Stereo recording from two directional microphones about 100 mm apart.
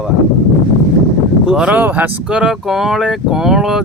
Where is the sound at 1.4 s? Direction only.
10° right (ahead or behind).